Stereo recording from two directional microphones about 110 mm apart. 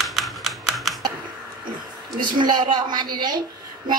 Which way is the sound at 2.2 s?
40° right (ahead or behind).